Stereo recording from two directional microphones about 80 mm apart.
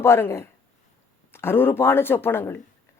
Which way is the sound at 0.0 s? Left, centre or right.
Left.